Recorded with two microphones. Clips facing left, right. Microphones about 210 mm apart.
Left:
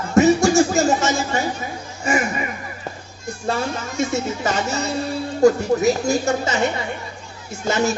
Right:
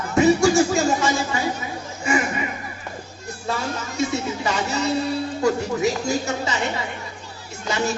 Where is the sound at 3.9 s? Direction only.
45° left (ahead or behind).